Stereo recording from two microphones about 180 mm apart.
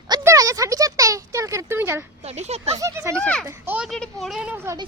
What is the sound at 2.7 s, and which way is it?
Speech, 15° right (ahead or behind).